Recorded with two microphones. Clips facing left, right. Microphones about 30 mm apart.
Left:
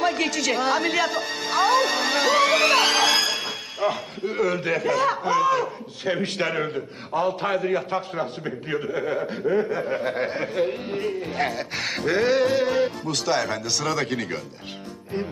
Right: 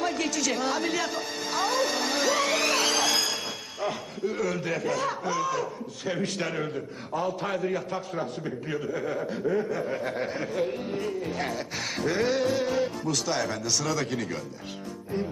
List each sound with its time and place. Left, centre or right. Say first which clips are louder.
0.0 s a woman's voice: left 5 dB; centre
3.8 s a man's voice: left 5 dB; left
4.8 s music: left 8 dB; centre
6.0 s a man's voice: left 5 dB; left
11.8 s music: left 5 dB; centre
12.8 s a man's voice: left 3 dB; left
13.7 s music: left 3 dB; centre
14.0 s a man's voice: left 3 dB; left